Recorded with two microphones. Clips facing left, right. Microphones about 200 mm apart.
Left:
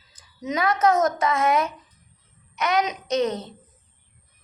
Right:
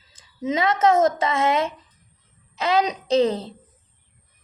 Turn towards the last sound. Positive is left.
turn(degrees=-30)  # may be behind; listen again after turning